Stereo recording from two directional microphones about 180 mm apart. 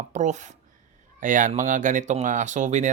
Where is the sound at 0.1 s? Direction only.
40° right (ahead or behind).